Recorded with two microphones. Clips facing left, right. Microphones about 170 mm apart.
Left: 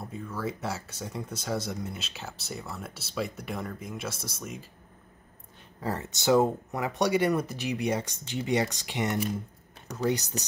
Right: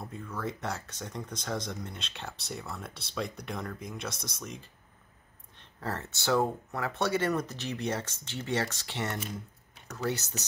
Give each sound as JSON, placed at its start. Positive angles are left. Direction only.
{"t": 0.0, "sound": "speech", "side_deg": 5}